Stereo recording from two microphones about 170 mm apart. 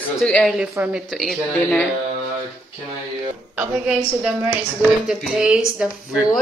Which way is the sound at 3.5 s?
5° right (ahead or behind).